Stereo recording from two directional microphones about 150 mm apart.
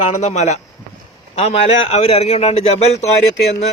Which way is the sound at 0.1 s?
50° left (ahead or behind).